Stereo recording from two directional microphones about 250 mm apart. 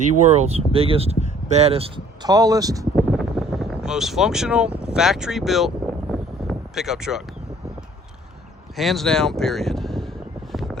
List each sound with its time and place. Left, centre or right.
0.2 s speech: right
2.9 s a sound: centre
8.7 s speech: centre